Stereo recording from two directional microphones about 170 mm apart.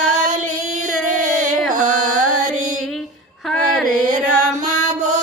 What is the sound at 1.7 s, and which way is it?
Carnatic music, 45° right (ahead or behind).